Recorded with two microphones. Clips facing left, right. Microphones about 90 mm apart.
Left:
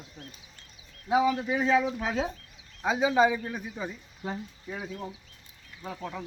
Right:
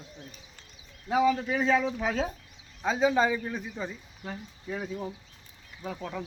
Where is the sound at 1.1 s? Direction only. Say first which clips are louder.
Even; 15° left (ahead or behind).